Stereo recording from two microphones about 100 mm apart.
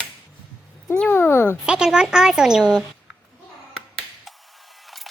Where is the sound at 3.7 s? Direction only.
5° left (ahead or behind).